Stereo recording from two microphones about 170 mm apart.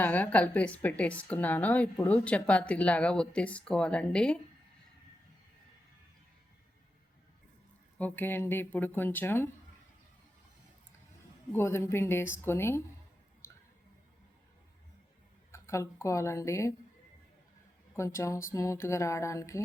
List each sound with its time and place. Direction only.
0.0 s speech: 10° left (ahead or behind)
7.9 s speech: 10° left (ahead or behind)
11.5 s speech: 15° left (ahead or behind)
15.5 s speech: 15° left (ahead or behind)
17.9 s speech: 15° left (ahead or behind)